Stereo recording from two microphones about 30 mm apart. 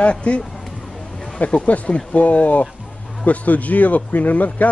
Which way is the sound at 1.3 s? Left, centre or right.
Left.